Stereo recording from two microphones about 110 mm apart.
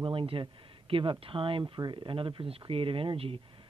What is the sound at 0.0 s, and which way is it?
Speech, 50° right (ahead or behind).